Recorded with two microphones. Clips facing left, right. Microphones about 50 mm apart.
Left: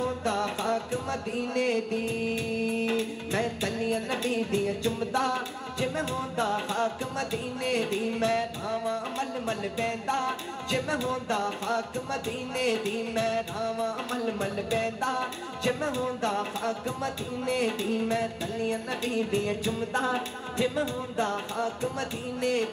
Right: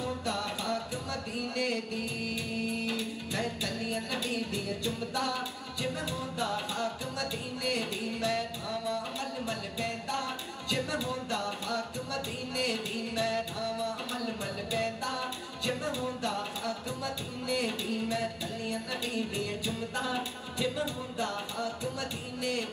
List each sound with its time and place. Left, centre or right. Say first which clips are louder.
0.0 s music: left 5 dB; left